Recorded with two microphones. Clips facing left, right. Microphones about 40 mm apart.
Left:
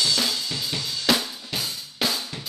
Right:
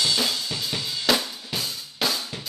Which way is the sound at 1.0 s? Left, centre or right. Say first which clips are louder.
Even; centre.